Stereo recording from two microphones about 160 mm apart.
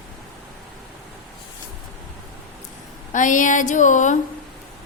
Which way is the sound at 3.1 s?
55° left (ahead or behind).